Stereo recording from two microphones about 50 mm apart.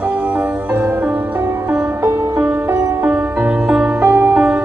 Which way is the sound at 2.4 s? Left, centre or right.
Right.